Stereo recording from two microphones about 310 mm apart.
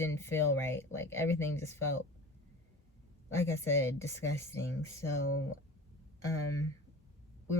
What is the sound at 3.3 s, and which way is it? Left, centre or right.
Speech, centre.